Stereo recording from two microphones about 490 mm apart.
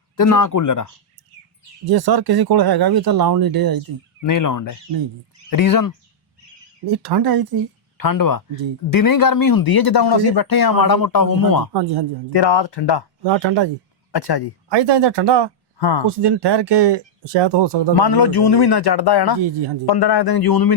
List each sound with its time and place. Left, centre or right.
0.2 s speech: left
1.8 s speech: right
4.2 s speech: left
6.8 s speech: right
7.9 s speech: left
11.7 s speech: right
12.3 s speech: left
13.2 s speech: right
14.1 s speech: left
14.7 s speech: right
15.8 s speech: left
16.0 s speech: right
17.9 s speech: left